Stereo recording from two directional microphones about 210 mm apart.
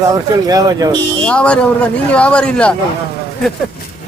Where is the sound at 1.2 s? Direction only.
5° left (ahead or behind).